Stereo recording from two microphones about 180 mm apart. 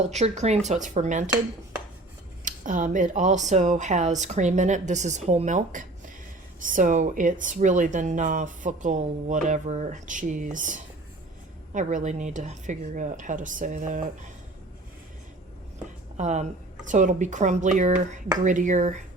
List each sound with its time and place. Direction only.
0.1 s speech: 40° right (ahead or behind)
2.4 s speech: 45° right (ahead or behind)
16.1 s speech: 40° right (ahead or behind)